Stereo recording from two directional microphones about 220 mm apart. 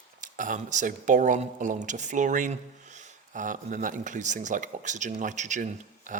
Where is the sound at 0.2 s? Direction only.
35° right (ahead or behind).